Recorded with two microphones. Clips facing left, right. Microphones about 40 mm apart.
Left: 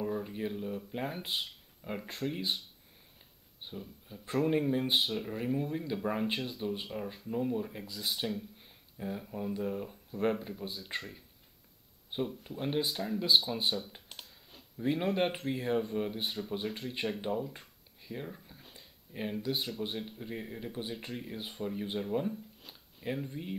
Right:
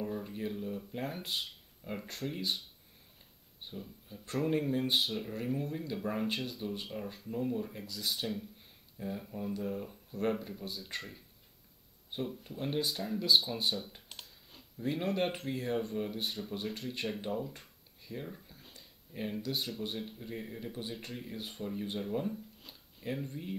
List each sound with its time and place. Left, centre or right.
0.0 s speech: centre
3.6 s speech: centre
8.5 s a sound: centre
9.3 s speech: centre
12.1 s speech: centre
13.9 s computer keyboard: centre
14.8 s speech: centre
17.3 s a sound: centre
19.4 s speech: centre